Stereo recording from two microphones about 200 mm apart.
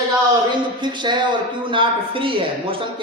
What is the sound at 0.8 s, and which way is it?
A man's voice, 20° right (ahead or behind).